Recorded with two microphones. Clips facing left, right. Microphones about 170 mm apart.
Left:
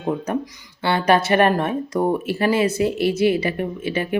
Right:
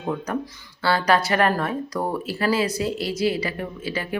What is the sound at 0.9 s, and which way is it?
Speech, 25° left (ahead or behind).